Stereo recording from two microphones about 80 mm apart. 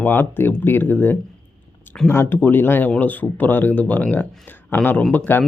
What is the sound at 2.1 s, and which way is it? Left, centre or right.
Speech, left.